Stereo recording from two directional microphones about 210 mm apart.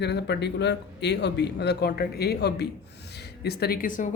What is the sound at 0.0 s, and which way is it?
Speech, 55° left (ahead or behind).